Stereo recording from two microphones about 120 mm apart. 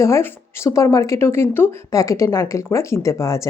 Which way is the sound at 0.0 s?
25° left (ahead or behind).